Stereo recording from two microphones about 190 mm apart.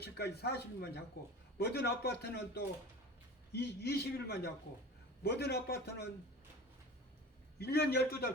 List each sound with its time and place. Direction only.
0.0 s a man's voice: 60° left (ahead or behind)
3.5 s a man's voice: 55° left (ahead or behind)
7.6 s a man's voice: 55° left (ahead or behind)